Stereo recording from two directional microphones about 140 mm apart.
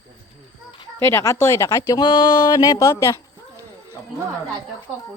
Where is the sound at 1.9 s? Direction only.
35° left (ahead or behind).